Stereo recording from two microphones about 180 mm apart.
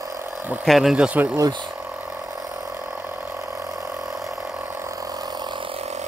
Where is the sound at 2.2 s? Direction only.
20° right (ahead or behind).